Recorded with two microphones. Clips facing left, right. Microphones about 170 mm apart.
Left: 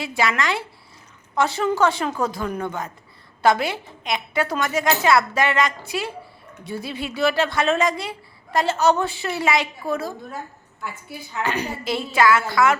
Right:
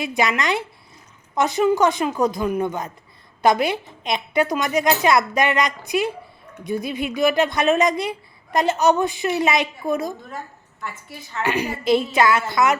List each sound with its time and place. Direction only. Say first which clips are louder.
0.0 s a woman's voice: right 1 dB; 20° right (ahead or behind)
10.2 s a woman's voice: even; 5° left (ahead or behind)
11.4 s a woman's voice: right 6 dB; 10° right (ahead or behind)